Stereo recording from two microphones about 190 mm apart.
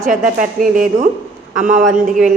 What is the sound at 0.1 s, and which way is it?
A woman's voice, 45° right (ahead or behind).